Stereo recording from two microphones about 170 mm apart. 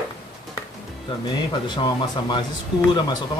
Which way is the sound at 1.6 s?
25° left (ahead or behind).